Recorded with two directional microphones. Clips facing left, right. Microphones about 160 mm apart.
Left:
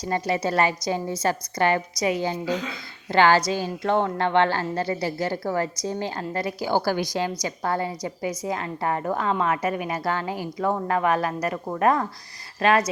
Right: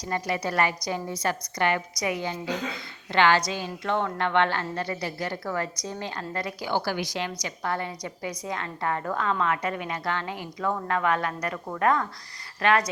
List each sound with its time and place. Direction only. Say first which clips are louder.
0.0 s a woman's voice: left 4 dB; 25° left (ahead or behind)